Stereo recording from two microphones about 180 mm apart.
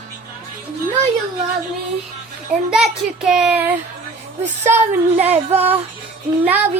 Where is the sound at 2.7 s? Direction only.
Centre (ahead or behind).